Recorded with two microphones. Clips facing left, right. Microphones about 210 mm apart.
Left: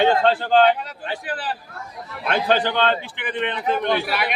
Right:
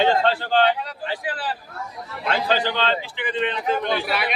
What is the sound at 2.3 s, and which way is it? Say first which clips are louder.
A man's voice: left 3 dB; 50° left (ahead or behind).